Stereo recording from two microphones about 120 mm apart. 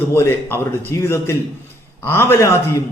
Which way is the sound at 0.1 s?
20° left (ahead or behind).